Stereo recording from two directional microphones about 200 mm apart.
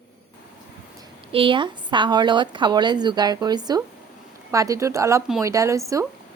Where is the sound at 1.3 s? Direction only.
25° right (ahead or behind).